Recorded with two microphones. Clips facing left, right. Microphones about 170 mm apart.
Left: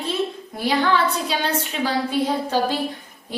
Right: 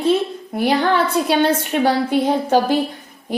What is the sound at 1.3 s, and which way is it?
A woman's voice, 55° right (ahead or behind).